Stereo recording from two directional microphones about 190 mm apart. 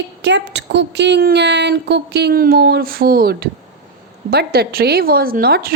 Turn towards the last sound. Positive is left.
turn(degrees=-55)  # may be behind; listen again after turning